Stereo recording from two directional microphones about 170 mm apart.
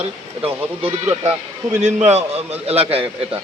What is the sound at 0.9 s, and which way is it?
Speech, 15° right (ahead or behind).